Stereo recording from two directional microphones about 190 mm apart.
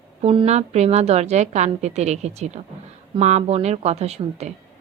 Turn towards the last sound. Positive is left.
turn(degrees=-35)  # may be behind; listen again after turning